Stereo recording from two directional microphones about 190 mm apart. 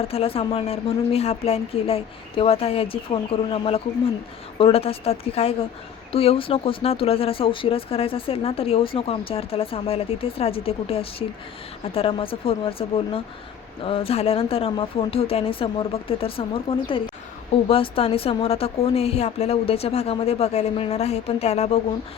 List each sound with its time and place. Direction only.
0.1 s speech: 30° left (ahead or behind)
13.8 s speech: 30° left (ahead or behind)